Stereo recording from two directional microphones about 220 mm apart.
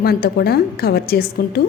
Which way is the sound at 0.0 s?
45° left (ahead or behind).